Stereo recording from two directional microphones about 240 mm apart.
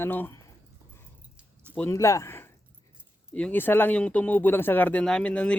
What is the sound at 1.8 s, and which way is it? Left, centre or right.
Speech, centre.